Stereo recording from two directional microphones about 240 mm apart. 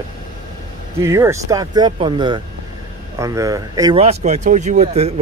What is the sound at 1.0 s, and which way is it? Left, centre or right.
Speech, centre.